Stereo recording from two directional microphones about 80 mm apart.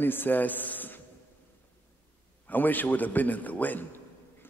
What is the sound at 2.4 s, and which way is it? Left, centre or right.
A man's voice, left.